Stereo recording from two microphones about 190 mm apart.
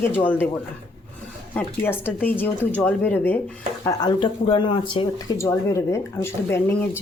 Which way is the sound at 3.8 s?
20° left (ahead or behind).